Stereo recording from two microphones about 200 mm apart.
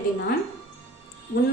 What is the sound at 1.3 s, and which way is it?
Speech, 55° left (ahead or behind).